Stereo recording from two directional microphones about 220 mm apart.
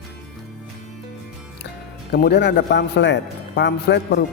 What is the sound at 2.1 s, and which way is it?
A man's voice, 50° left (ahead or behind).